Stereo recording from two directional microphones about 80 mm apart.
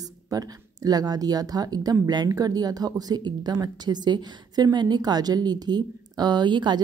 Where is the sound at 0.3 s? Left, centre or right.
Right.